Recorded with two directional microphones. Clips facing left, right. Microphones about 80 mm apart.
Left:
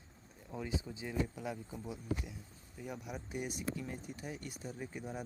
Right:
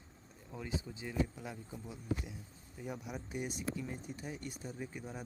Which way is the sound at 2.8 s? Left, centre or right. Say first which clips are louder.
Right 1 dB; centre.